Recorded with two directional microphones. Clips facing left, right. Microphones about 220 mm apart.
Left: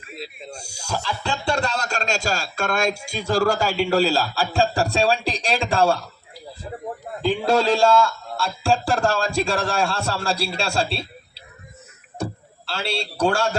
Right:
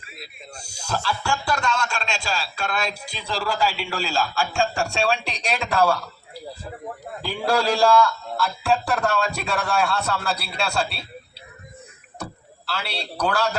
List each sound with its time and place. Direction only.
0.5 s speech: 10° left (ahead or behind)
1.5 s a man's voice: 35° left (ahead or behind)
7.2 s a man's voice: 20° left (ahead or behind)